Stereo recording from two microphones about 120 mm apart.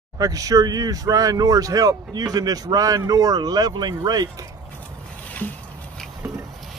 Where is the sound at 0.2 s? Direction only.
30° right (ahead or behind).